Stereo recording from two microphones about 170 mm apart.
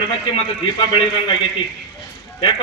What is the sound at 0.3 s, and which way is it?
A man's voice, 35° left (ahead or behind).